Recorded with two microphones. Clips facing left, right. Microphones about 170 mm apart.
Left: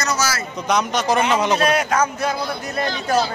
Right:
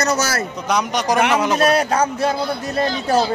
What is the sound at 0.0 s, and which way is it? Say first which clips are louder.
Speech: right 3 dB; 60° right (ahead or behind).